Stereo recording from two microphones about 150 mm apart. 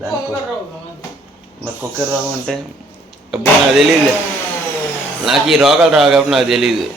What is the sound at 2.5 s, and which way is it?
Speech, 5° left (ahead or behind).